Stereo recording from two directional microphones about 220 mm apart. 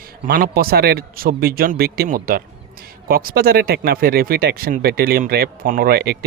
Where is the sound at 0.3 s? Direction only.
40° right (ahead or behind).